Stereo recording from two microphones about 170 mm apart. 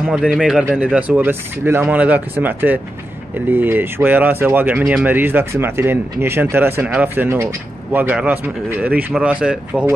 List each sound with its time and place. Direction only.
0.1 s speech: 5° right (ahead or behind)